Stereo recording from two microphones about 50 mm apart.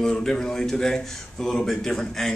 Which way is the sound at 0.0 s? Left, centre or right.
Centre.